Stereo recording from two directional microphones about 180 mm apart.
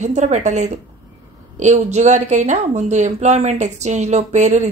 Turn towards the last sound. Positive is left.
turn(degrees=-40)  # may be behind; listen again after turning